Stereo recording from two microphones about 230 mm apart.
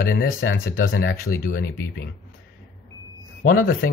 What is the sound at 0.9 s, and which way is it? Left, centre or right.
Speech, left.